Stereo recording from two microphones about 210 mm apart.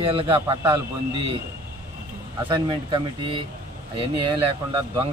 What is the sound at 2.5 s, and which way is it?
Speech, 25° right (ahead or behind).